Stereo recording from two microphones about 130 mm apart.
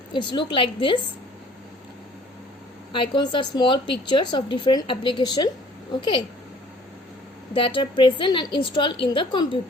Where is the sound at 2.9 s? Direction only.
35° left (ahead or behind).